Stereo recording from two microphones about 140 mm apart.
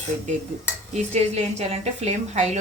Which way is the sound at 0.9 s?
50° right (ahead or behind).